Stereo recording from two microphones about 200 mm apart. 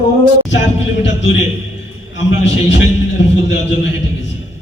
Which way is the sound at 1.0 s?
65° left (ahead or behind).